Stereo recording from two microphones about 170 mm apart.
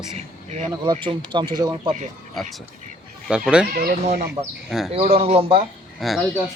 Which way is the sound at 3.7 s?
60° right (ahead or behind).